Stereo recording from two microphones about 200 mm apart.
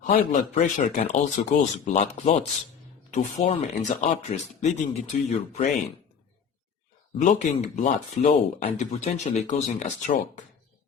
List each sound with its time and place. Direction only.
0.0 s speech: 35° left (ahead or behind)
7.2 s speech: 35° left (ahead or behind)